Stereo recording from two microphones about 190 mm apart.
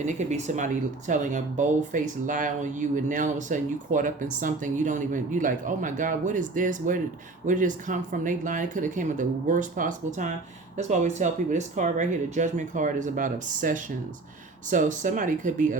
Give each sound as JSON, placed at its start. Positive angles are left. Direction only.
{"t": 0.0, "sound": "speech", "side_deg": -40}